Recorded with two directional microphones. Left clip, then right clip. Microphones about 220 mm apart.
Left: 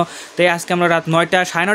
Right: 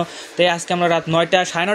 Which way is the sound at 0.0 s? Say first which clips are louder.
Left 2 dB; 25° left (ahead or behind).